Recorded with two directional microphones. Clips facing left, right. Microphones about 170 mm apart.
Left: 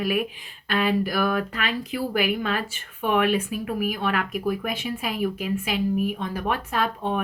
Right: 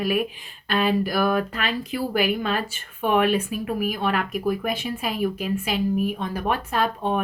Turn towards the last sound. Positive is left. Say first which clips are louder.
# right 2 dB
turn(degrees=-35)  # may be behind; listen again after turning